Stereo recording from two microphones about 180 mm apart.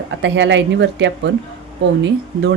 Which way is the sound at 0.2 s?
90° right.